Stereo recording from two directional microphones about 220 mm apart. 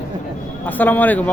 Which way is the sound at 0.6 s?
10° left (ahead or behind).